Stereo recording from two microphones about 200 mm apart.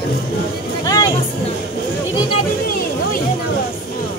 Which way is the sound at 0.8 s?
20° left (ahead or behind).